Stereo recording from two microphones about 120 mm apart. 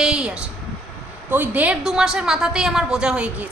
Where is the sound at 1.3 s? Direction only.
15° right (ahead or behind).